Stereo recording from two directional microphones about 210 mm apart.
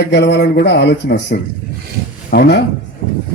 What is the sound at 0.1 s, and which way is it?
Speech, 55° left (ahead or behind).